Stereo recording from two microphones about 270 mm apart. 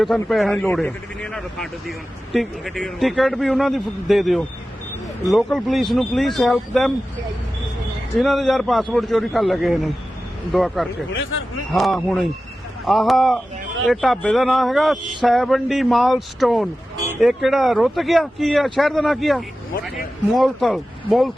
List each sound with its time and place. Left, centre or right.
0.0 s a man's voice: centre
8.2 s a man's voice: centre
11.1 s speech: left
11.7 s a man's voice: centre